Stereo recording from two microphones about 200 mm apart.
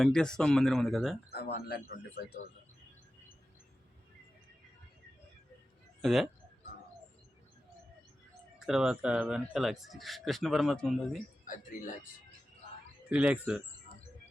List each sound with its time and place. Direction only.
0.0 s speech: 5° left (ahead or behind)
1.3 s speech: 55° left (ahead or behind)
6.0 s speech: centre (ahead or behind)
8.5 s speech: 5° right (ahead or behind)
11.4 s speech: 40° left (ahead or behind)
13.1 s speech: 5° right (ahead or behind)